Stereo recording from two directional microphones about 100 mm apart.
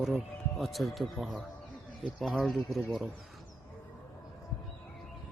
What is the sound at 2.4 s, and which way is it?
Speech, centre (ahead or behind).